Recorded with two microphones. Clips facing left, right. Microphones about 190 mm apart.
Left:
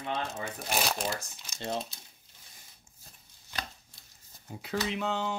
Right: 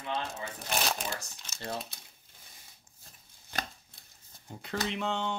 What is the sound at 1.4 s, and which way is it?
Speech, 20° left (ahead or behind).